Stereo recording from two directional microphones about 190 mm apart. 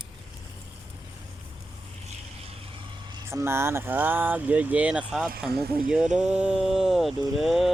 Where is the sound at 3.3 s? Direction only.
15° right (ahead or behind).